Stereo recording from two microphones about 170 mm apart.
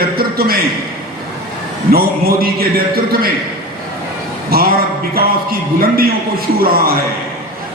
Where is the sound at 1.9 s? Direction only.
65° right (ahead or behind).